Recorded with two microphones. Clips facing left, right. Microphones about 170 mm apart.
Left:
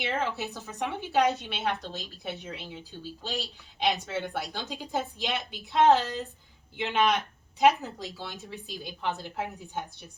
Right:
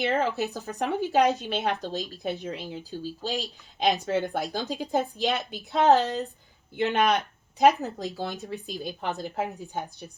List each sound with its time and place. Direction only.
0.0 s a woman's voice: 40° right (ahead or behind)